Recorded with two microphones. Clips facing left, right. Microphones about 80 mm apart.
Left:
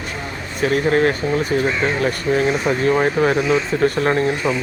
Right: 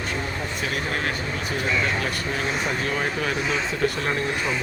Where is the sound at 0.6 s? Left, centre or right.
Left.